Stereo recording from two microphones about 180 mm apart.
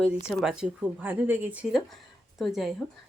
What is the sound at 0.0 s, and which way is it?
Speech, 5° right (ahead or behind).